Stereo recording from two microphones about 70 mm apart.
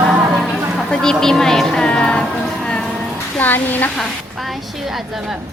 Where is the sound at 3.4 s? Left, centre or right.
Left.